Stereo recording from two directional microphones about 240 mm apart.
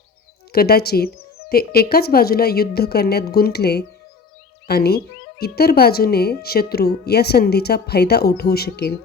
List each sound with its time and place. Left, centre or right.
0.5 s a woman's voice: left